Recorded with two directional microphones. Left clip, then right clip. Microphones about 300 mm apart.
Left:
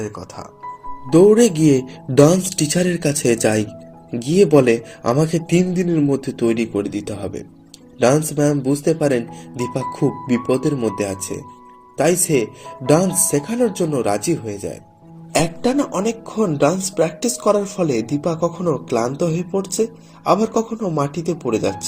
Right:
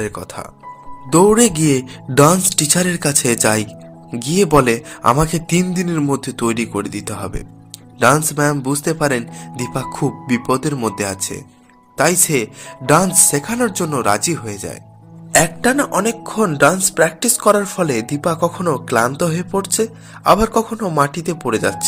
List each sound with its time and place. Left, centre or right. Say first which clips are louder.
0.1 s speech: right 4 dB; right
1.1 s speech: even; right